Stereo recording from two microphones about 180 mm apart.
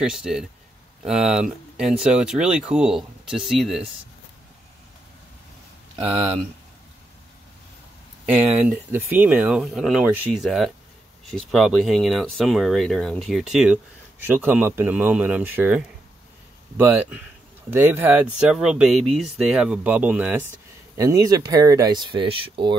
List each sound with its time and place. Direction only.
0.0 s speech: 5° right (ahead or behind)
6.0 s speech: 30° right (ahead or behind)
8.5 s speech: 10° right (ahead or behind); by 22.8 s 30° right (ahead or behind)